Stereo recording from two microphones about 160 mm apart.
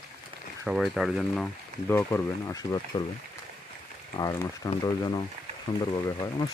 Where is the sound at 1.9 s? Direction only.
15° left (ahead or behind).